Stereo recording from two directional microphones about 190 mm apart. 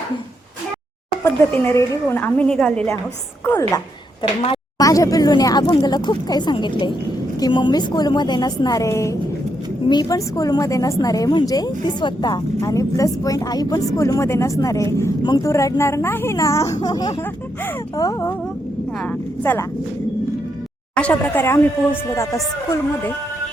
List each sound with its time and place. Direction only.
1.2 s a woman's voice: 15° left (ahead or behind)
20.9 s speech: 5° left (ahead or behind)